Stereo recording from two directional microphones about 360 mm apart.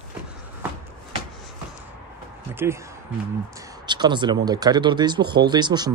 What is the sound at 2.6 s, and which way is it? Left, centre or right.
Speech, centre.